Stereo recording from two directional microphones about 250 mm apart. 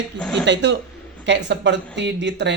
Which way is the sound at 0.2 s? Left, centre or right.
Centre.